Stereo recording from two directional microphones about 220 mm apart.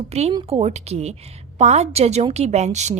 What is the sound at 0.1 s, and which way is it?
A woman's voice, 30° right (ahead or behind).